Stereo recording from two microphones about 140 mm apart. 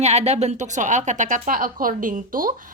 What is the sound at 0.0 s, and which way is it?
A woman's voice, 50° right (ahead or behind).